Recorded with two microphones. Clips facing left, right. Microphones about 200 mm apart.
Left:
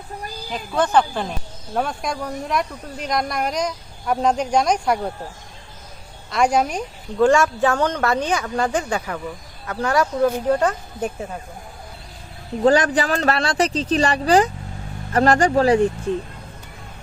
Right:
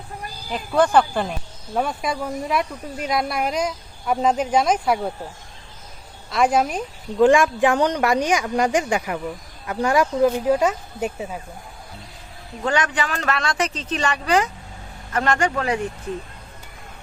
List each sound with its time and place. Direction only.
0.8 s speech: 10° right (ahead or behind)
6.3 s speech: centre (ahead or behind)
7.2 s speech: 15° right (ahead or behind)
12.6 s speech: 35° left (ahead or behind)